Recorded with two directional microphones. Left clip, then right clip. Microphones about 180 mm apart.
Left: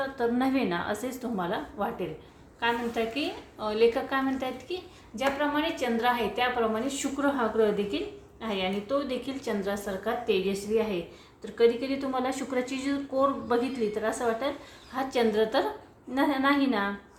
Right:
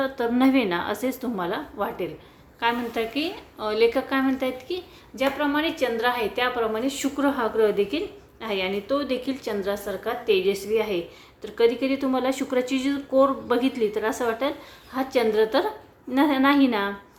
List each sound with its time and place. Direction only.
0.0 s a woman's voice: 30° right (ahead or behind)